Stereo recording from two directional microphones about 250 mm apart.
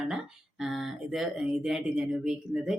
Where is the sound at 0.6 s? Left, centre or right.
Centre.